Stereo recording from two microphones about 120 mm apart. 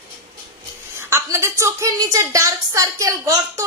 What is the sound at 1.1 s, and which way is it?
A woman's voice, 25° right (ahead or behind).